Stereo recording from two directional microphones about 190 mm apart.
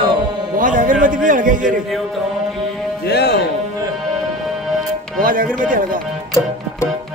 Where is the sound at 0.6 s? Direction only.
45° right (ahead or behind).